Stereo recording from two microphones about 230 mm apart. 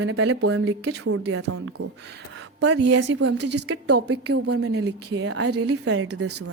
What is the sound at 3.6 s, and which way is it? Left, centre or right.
A woman's voice, right.